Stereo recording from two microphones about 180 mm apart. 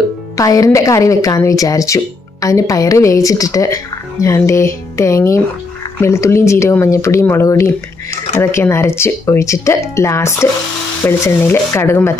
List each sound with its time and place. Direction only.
0.4 s a woman's voice: 20° left (ahead or behind)